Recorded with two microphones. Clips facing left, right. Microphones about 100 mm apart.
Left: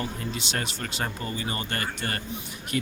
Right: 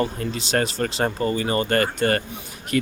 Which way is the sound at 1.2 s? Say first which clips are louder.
Right 10 dB; 55° right (ahead or behind).